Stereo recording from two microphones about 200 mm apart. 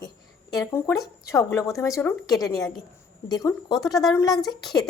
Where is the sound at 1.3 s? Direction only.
15° left (ahead or behind).